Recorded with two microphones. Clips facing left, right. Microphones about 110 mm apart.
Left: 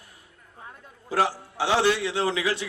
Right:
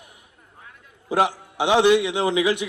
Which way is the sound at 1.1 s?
20° right (ahead or behind).